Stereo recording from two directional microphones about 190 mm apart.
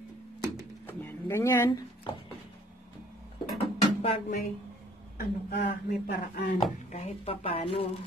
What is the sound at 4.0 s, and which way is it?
Music, 30° left (ahead or behind).